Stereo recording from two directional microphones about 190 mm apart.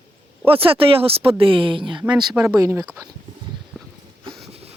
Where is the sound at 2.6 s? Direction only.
15° right (ahead or behind).